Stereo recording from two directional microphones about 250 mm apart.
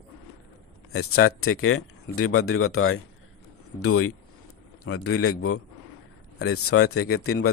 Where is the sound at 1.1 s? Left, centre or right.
Left.